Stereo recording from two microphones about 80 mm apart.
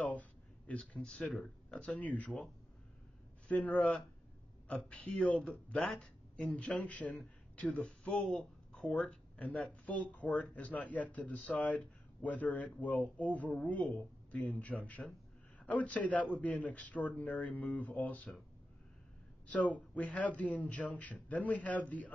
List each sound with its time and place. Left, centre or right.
0.1 s a sound: centre
1.3 s speech: centre
1.8 s speech: centre
3.4 s speech: centre
19.4 s speech: centre